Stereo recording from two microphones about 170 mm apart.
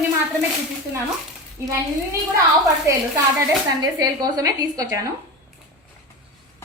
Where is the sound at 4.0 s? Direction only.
20° right (ahead or behind).